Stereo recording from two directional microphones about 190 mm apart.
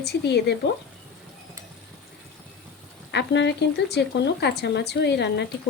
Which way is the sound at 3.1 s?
65° left (ahead or behind).